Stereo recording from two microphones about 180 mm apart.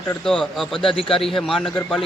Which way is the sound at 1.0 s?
30° left (ahead or behind).